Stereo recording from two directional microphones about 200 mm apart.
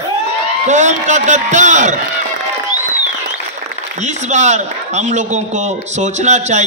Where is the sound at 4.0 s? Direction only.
35° right (ahead or behind).